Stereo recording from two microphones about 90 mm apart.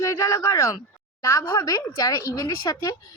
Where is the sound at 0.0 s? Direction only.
35° left (ahead or behind).